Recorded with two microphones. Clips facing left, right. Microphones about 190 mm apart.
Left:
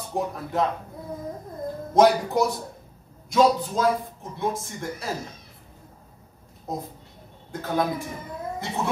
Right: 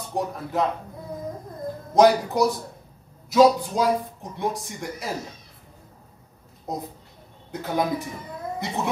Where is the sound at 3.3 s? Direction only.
5° right (ahead or behind).